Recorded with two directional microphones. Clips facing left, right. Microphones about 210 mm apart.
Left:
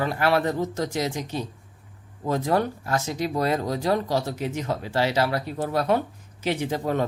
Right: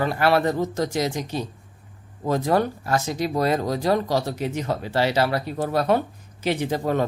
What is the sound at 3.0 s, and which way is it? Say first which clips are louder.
Speech: right 1 dB; 40° right (ahead or behind).